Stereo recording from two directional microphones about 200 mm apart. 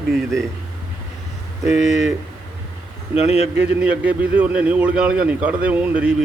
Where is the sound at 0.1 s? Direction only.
Centre (ahead or behind).